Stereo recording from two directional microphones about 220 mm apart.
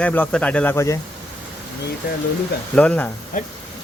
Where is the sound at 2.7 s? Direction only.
5° left (ahead or behind).